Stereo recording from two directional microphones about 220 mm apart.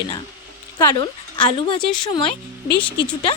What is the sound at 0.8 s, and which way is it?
Speech, 15° left (ahead or behind).